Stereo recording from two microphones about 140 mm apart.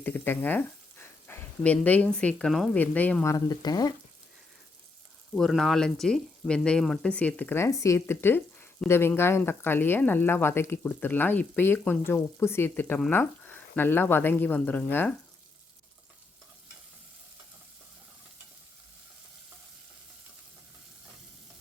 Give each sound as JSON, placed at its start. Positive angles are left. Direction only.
{"t": 0.0, "sound": "speech", "side_deg": 15}
{"t": 3.2, "sound": "speech", "side_deg": 25}
{"t": 5.3, "sound": "speech", "side_deg": 0}